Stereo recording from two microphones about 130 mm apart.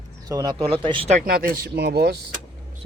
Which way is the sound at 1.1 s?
80° right.